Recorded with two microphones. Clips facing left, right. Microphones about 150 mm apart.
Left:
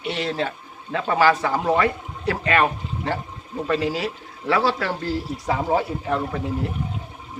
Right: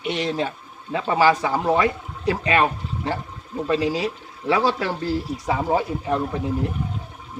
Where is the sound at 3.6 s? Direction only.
15° right (ahead or behind).